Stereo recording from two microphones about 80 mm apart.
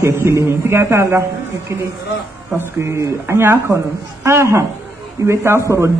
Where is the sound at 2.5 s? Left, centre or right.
Right.